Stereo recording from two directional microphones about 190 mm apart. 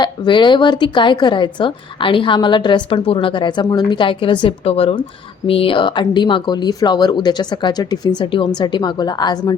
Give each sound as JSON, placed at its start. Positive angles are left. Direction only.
{"t": 0.0, "sound": "speech", "side_deg": 25}